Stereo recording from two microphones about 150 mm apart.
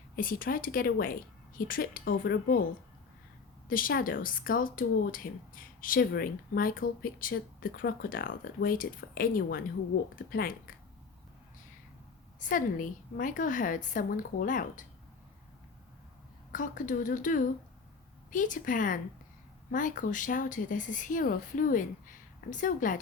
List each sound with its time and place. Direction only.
0.2 s speech: 70° left (ahead or behind)
3.7 s speech: 70° left (ahead or behind)
12.4 s speech: 60° left (ahead or behind)
16.5 s speech: 60° left (ahead or behind)